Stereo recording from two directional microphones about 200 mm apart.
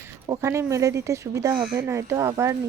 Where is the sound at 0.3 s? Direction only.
15° right (ahead or behind).